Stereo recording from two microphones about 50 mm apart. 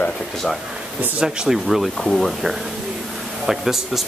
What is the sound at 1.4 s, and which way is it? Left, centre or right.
Speech, centre.